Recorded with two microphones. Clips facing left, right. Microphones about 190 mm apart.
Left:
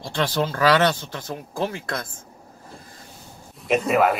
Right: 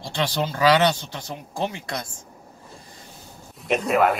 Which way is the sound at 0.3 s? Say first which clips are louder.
Even; 55° left (ahead or behind).